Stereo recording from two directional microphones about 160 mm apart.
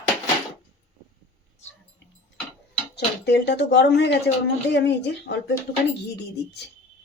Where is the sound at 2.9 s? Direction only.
90° left.